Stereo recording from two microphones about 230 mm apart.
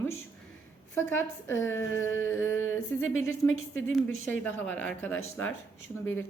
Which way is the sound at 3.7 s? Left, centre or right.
Centre.